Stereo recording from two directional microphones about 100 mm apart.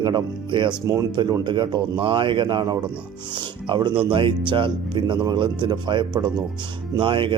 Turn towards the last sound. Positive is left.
turn(degrees=-55)  # may be behind; listen again after turning